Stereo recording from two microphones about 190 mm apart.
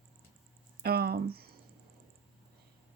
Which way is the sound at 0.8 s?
55° right (ahead or behind).